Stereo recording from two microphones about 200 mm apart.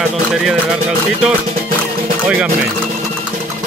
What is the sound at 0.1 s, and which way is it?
Speech, centre (ahead or behind).